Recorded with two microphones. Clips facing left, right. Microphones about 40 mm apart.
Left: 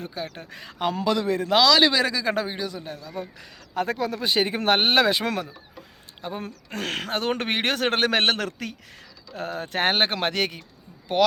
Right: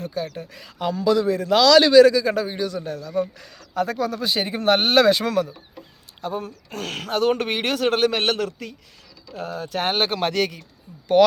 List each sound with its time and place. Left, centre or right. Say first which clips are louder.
0.0 s speech: right 5 dB; left
0.3 s speech: right 1 dB; left
1.6 s a man's voice: right 4 dB; centre
1.9 s speech: right 11 dB; left
2.5 s a man's voice: right 5 dB; centre
3.8 s speech: right 2 dB; left
4.8 s speech: right 3 dB; centre
6.7 s speech: left 2 dB; left
8.4 s speech: left 1 dB; left
9.3 s speech: right 1 dB; left